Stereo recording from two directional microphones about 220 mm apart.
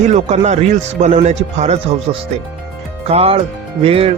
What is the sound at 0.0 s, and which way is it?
Speech, 30° right (ahead or behind).